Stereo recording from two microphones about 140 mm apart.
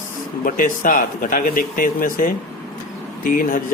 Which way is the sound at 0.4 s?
80° left.